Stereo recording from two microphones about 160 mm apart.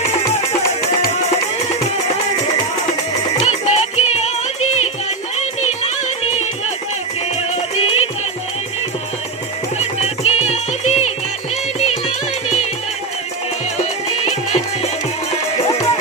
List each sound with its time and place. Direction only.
3.4 s music: 45° left (ahead or behind)
7.5 s music: 40° left (ahead or behind)
10.0 s music: 40° left (ahead or behind)
14.3 s music: 45° left (ahead or behind)